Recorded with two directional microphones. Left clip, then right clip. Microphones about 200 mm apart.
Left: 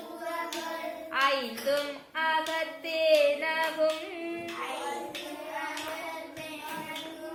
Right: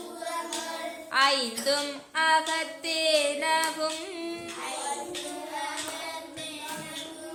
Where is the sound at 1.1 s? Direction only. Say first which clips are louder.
Right 4 dB; 50° right (ahead or behind).